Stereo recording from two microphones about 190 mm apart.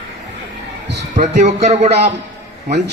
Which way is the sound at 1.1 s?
40° right (ahead or behind).